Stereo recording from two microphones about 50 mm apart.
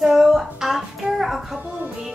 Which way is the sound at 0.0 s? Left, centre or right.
Centre.